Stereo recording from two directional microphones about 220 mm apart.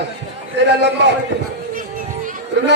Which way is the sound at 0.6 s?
50° right (ahead or behind).